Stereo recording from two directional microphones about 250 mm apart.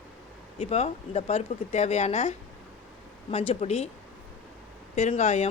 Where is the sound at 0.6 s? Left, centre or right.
Left.